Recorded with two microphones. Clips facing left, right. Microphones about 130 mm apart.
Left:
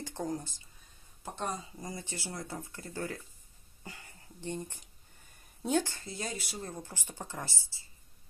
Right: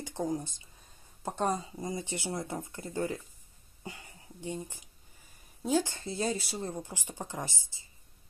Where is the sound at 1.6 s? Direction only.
20° right (ahead or behind).